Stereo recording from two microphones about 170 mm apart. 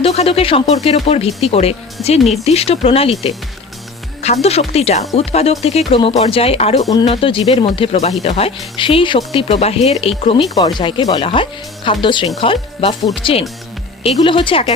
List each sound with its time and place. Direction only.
0.0 s speech: 35° left (ahead or behind)
4.4 s speech: 40° left (ahead or behind)
10.5 s speech: 25° left (ahead or behind)